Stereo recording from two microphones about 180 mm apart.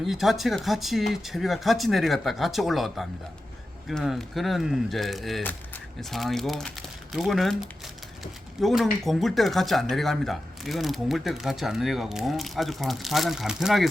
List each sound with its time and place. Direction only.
0.0 s speech: centre (ahead or behind)